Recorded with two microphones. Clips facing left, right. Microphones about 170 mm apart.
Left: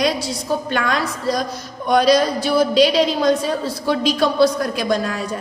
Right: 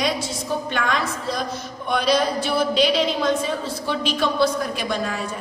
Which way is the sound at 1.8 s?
40° left (ahead or behind).